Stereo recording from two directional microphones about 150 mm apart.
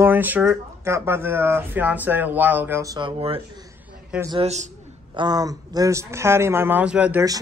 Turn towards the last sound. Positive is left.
turn(degrees=-10)  # may be behind; listen again after turning